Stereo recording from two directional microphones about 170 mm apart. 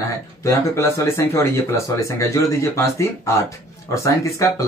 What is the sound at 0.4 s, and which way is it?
Speech, 15° left (ahead or behind).